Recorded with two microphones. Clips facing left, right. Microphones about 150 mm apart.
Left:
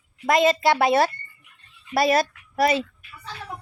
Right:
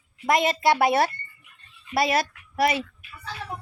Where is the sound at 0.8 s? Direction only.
25° left (ahead or behind).